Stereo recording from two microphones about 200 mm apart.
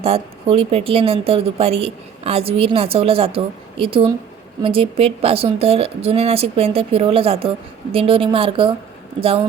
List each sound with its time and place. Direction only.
0.0 s speech: 30° right (ahead or behind)